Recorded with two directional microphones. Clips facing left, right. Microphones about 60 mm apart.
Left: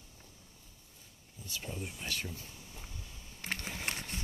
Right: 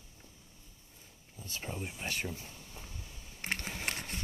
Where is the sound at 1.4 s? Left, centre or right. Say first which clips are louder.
Right 1 dB; right.